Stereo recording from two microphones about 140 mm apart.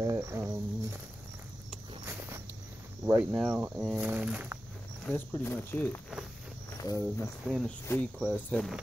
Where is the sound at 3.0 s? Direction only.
10° right (ahead or behind).